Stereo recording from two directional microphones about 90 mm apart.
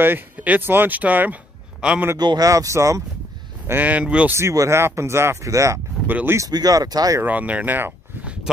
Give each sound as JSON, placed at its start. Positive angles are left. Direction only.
{"t": 0.0, "sound": "speech", "side_deg": -20}
{"t": 2.1, "sound": "speech", "side_deg": -50}
{"t": 3.6, "sound": "speech", "side_deg": -20}
{"t": 4.3, "sound": "speech", "side_deg": -30}
{"t": 6.0, "sound": "speech", "side_deg": -20}
{"t": 6.5, "sound": "speech", "side_deg": -45}
{"t": 7.2, "sound": "speech", "side_deg": -15}